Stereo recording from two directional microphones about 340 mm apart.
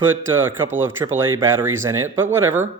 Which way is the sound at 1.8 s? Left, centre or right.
Centre.